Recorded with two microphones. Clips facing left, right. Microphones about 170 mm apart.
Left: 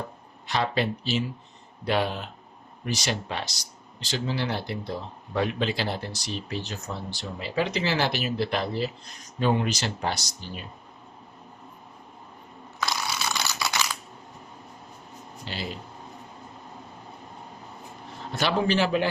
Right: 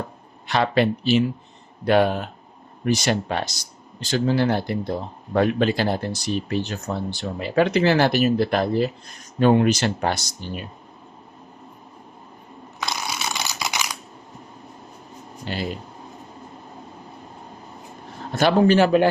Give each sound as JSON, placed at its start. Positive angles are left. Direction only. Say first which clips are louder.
{"t": 0.4, "sound": "speech", "louder": "right 6 dB", "side_deg": -65}
{"t": 13.3, "sound": "computer keyboard", "louder": "right 1 dB", "side_deg": -15}
{"t": 15.4, "sound": "a sound", "louder": "right 7 dB", "side_deg": -50}
{"t": 18.3, "sound": "speech", "louder": "right 8 dB", "side_deg": -50}